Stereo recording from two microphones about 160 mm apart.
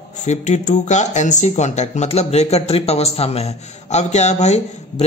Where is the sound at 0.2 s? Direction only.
45° left (ahead or behind).